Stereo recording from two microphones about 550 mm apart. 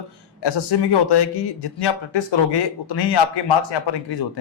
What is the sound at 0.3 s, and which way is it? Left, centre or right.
A man's voice, left.